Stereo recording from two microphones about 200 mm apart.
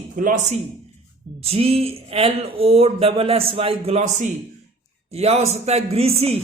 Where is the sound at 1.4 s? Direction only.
30° right (ahead or behind).